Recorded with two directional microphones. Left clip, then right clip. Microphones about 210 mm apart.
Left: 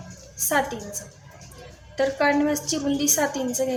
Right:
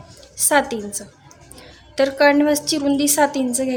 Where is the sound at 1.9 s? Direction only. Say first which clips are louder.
Right 6 dB; 60° right (ahead or behind).